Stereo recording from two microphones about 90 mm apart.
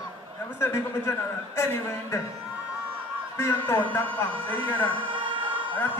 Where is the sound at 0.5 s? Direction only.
30° left (ahead or behind).